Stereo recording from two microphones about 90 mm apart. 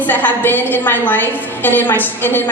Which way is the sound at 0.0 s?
20° left (ahead or behind).